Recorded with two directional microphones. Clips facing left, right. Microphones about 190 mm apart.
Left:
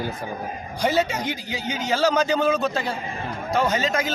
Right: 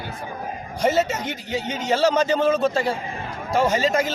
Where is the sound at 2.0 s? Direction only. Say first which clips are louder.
Right 1 dB; 25° right (ahead or behind).